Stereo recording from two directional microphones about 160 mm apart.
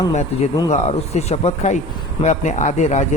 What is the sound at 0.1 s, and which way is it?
Speech, 45° left (ahead or behind).